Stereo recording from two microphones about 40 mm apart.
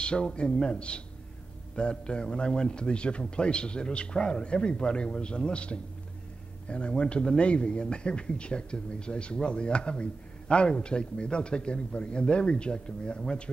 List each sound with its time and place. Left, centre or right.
0.0 s a man's voice: left